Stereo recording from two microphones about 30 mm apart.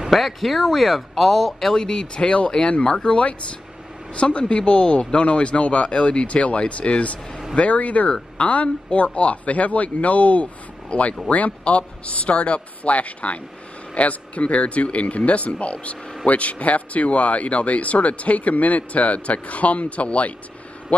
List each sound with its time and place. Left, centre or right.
0.1 s speech: centre
1.8 s speech: left